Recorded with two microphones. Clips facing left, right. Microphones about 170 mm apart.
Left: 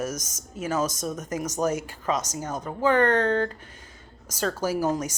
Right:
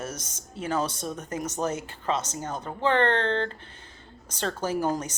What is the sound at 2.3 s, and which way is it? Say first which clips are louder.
Speech: left 1 dB; 10° left (ahead or behind).